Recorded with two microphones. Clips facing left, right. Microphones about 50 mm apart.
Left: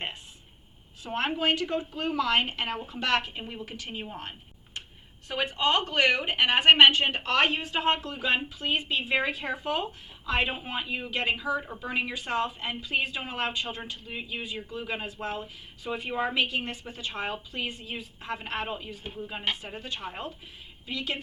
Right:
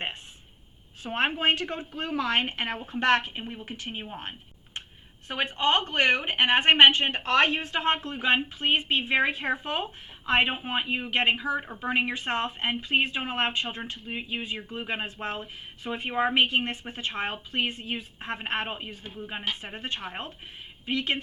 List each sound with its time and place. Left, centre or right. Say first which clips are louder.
1.0 s a woman's voice: right 2 dB; right